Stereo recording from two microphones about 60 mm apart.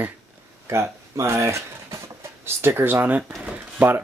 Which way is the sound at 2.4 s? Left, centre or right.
Right.